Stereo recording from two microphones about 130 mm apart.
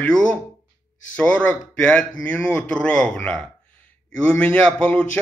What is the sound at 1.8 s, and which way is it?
Speech, 10° left (ahead or behind).